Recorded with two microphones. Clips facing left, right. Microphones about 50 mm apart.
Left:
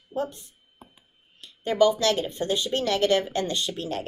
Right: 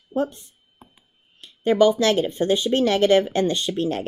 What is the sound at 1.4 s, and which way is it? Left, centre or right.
Speech, right.